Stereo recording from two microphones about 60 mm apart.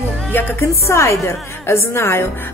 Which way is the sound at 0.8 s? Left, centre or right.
Left.